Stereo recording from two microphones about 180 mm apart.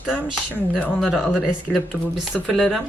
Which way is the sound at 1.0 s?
5° right (ahead or behind).